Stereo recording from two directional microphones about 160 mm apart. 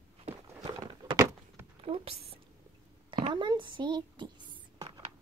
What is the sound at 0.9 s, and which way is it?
Door, 15° right (ahead or behind).